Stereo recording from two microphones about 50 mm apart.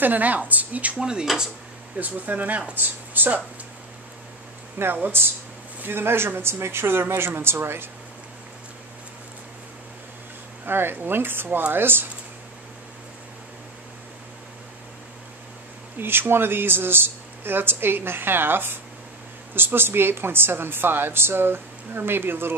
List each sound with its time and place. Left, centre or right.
0.0 s a woman's voice: right
0.9 s speech: centre
2.0 s a woman's voice: right
5.0 s a woman's voice: right
10.6 s a woman's voice: right
16.0 s a woman's voice: right